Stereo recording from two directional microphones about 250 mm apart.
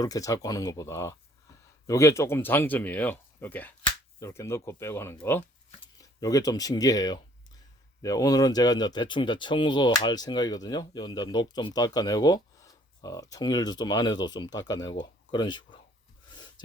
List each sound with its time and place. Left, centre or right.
0.0 s speech: centre